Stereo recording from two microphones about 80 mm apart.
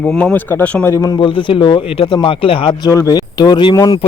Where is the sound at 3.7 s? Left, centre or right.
Left.